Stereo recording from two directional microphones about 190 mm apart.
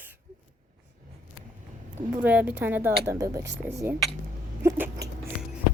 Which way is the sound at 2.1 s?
10° right (ahead or behind).